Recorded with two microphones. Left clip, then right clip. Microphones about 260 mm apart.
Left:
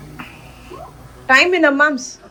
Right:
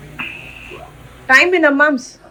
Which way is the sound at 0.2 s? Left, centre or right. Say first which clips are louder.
Right 9 dB; centre.